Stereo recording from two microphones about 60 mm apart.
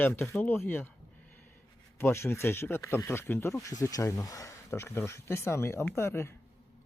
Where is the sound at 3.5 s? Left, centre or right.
Left.